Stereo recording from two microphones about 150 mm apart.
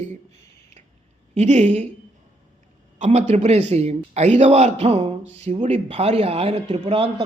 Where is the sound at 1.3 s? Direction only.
50° right (ahead or behind).